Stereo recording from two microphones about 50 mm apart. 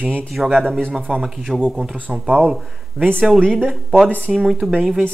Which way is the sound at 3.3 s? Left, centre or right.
Centre.